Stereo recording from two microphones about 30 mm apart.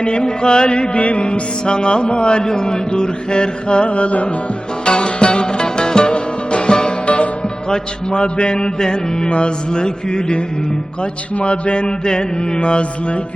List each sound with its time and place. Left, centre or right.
0.0 s music: left
4.9 s music: left
7.0 s music: left
7.7 s mantra: left
9.3 s music: left
11.3 s music: left